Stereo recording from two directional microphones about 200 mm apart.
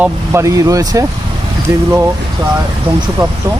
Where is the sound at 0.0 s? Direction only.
15° right (ahead or behind).